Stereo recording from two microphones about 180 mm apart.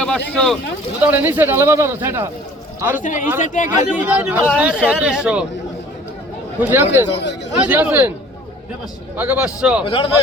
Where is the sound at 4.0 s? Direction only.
10° right (ahead or behind).